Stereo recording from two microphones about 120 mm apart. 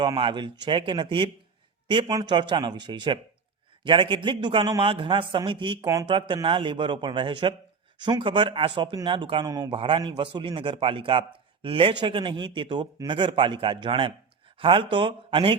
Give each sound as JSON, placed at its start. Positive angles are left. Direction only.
{"t": 0.0, "sound": "a man's voice", "side_deg": -40}
{"t": 5.8, "sound": "speech", "side_deg": -30}
{"t": 6.1, "sound": "a man's voice", "side_deg": -45}